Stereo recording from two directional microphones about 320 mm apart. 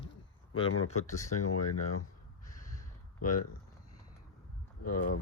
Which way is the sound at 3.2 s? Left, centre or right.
Left.